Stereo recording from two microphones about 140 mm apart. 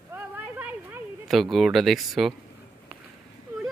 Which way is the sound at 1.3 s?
Centre (ahead or behind).